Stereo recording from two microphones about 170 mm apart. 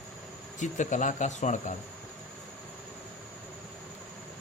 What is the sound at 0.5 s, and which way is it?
Speech, 45° left (ahead or behind).